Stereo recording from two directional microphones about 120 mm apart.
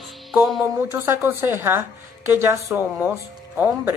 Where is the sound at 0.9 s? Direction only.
20° right (ahead or behind).